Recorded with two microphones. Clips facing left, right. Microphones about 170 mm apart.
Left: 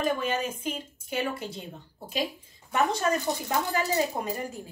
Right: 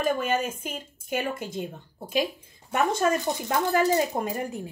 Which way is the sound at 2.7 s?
50° right (ahead or behind).